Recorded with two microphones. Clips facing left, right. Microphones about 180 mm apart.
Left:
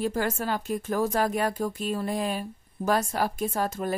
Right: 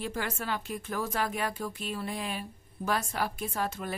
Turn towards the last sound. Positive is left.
turn(degrees=40)  # may be behind; listen again after turning